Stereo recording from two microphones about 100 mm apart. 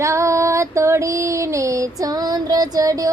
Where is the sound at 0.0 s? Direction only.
30° right (ahead or behind).